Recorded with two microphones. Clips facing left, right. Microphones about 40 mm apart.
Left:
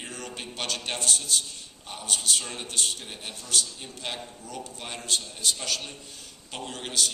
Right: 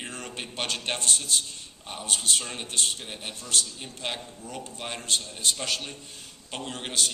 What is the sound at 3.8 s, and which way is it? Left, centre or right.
A man's voice, centre.